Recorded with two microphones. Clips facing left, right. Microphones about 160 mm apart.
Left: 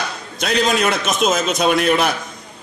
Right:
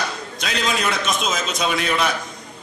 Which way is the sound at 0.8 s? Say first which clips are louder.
Left 5 dB; 55° left (ahead or behind).